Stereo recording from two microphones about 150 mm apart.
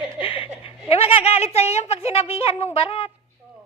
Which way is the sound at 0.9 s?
40° left (ahead or behind).